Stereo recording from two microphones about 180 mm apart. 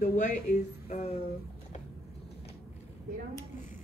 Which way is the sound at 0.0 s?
45° left (ahead or behind).